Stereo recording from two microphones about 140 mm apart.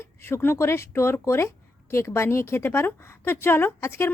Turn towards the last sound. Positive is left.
turn(degrees=15)  # may be behind; listen again after turning